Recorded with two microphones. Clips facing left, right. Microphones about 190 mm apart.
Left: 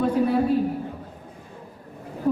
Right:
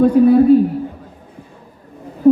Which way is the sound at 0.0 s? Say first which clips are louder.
Right 11 dB; 45° right (ahead or behind).